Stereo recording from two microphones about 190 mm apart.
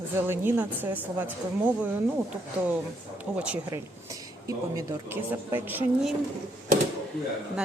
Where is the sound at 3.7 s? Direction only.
20° right (ahead or behind).